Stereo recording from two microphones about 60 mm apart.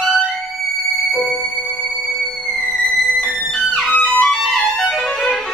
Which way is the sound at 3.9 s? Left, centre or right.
Centre.